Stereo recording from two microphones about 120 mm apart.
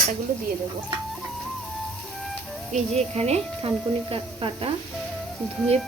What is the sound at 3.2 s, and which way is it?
Speech, 60° right (ahead or behind).